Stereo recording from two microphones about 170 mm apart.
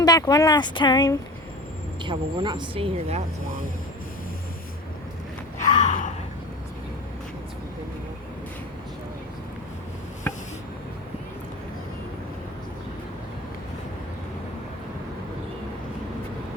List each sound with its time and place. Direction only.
0.0 s speech: 20° left (ahead or behind)
2.0 s speech: 25° right (ahead or behind)
5.6 s gasp: 45° left (ahead or behind)
10.3 s a sound: 10° left (ahead or behind)